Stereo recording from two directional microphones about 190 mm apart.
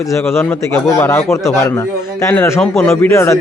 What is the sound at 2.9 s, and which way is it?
Speech, 15° left (ahead or behind).